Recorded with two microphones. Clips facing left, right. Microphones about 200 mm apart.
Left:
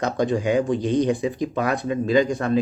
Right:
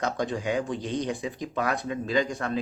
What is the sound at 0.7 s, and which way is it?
Speech, 55° left (ahead or behind).